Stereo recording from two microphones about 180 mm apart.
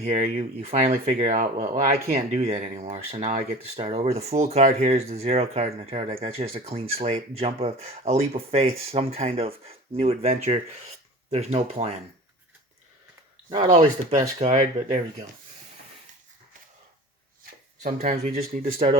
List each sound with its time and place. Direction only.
0.0 s speech: 45° right (ahead or behind)
2.1 s speech: 35° right (ahead or behind)
13.7 s speech: 40° right (ahead or behind)
18.0 s speech: 40° right (ahead or behind)